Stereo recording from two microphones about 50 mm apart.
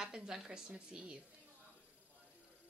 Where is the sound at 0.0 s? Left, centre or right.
Centre.